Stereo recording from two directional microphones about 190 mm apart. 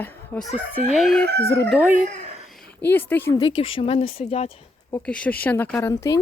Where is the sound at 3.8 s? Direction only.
30° left (ahead or behind).